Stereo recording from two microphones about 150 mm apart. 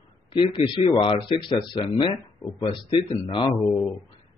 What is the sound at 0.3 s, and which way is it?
Speech, 35° left (ahead or behind).